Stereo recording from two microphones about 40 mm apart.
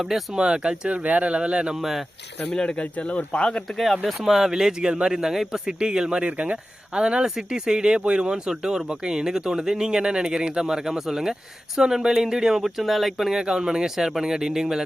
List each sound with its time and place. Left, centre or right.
0.3 s speech: right
0.9 s speech: right
1.8 s speech: centre
2.5 s speech: centre
2.7 s speech: left
4.2 s speech: centre
13.4 s speech: centre